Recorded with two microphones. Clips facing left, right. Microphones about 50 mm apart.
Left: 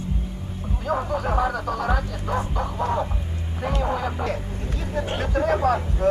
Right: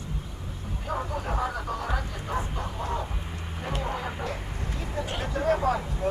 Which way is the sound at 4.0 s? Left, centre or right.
Left.